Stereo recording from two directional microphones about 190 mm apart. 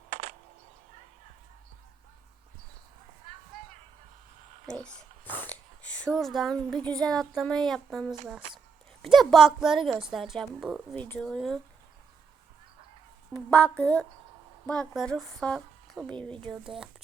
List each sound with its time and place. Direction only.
0.1 s a sound: 40° right (ahead or behind)
4.6 s a woman's voice: 5° left (ahead or behind)
10.9 s a woman's voice: 5° left (ahead or behind)
13.5 s a woman's voice: 10° left (ahead or behind)